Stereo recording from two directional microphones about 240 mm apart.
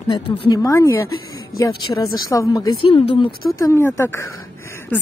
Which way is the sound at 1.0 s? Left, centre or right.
Left.